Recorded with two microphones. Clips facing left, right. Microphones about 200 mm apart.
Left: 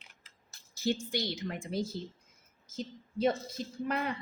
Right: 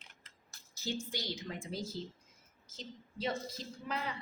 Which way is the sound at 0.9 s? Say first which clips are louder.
Left 7 dB; 65° left (ahead or behind).